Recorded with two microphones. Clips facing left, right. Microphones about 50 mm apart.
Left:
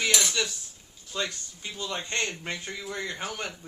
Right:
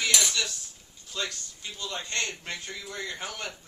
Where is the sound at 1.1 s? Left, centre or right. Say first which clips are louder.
Left 2 dB; centre.